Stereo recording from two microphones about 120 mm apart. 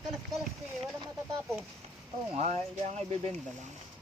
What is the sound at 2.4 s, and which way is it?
Speech, 70° right (ahead or behind).